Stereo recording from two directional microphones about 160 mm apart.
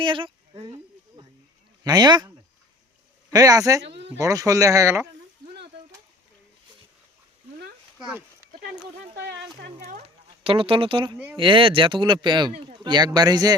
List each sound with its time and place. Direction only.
0.0 s speech: 30° right (ahead or behind)
1.8 s speech: 25° right (ahead or behind)
3.3 s speech: 20° right (ahead or behind)
3.8 s a sound: 90° right
4.2 s speech: 20° right (ahead or behind)
7.9 s speech: 5° right (ahead or behind)
9.1 s a sound: 90° right
9.8 s speech: 45° right (ahead or behind); by 13.6 s 25° right (ahead or behind)